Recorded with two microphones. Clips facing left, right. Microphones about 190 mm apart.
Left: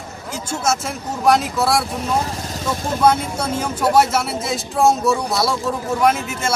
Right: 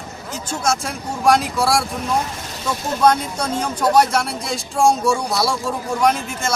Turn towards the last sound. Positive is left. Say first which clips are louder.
# left 1 dB
turn(degrees=5)  # may be behind; listen again after turning